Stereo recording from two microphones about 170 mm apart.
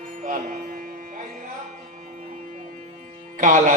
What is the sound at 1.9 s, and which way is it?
Music, 50° right (ahead or behind).